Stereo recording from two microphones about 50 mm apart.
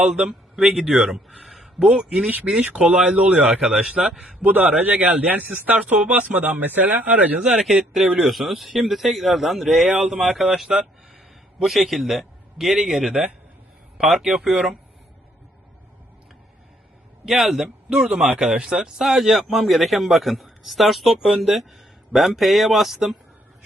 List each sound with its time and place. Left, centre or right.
0.0 s speech: centre
2.0 s speech: centre
3.4 s speech: centre
4.4 s speech: right
6.6 s speech: right
7.6 s speech: centre
17.2 s speech: centre